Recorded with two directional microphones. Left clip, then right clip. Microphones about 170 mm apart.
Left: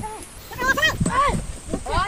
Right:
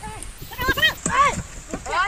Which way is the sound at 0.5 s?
25° left (ahead or behind).